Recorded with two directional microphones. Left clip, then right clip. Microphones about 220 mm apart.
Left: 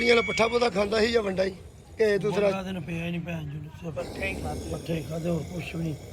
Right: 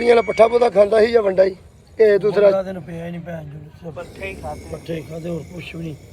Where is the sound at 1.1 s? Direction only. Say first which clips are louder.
Right 11 dB; 15° left (ahead or behind).